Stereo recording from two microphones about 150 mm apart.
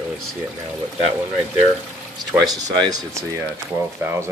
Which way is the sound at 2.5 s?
30° right (ahead or behind).